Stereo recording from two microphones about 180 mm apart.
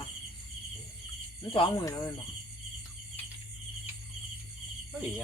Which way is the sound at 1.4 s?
25° left (ahead or behind).